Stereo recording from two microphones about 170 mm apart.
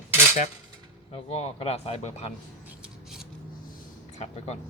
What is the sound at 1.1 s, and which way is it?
Speech, 40° left (ahead or behind).